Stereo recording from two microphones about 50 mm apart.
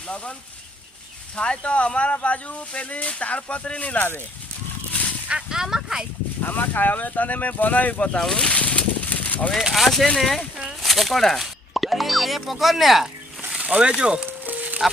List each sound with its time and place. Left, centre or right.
1.4 s speech: left
5.5 s speech: centre
6.4 s speech: left
7.9 s speech: left
8.2 s speech: centre
8.4 s a sound: left
9.6 s speech: centre
13.6 s speech: right
14.3 s a sound: right